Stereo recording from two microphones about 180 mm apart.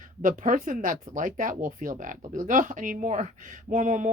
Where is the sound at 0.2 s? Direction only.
45° right (ahead or behind).